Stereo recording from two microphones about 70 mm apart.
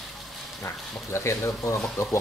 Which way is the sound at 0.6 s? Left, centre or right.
Left.